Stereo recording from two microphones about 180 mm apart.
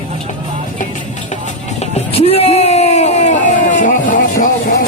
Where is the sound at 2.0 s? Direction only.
35° left (ahead or behind).